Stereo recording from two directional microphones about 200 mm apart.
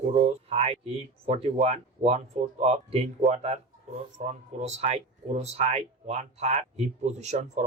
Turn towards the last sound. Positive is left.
turn(degrees=-35)  # may be behind; listen again after turning